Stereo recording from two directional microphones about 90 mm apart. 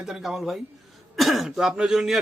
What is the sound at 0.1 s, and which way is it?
A man's voice, 5° right (ahead or behind).